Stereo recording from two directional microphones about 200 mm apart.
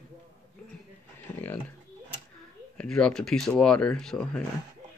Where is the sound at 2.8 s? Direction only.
5° left (ahead or behind).